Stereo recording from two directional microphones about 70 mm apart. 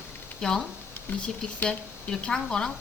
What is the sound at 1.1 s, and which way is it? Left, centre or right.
Speech, left.